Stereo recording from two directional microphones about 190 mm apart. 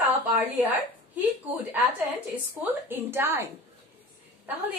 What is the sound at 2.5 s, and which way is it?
A woman's voice, 10° right (ahead or behind).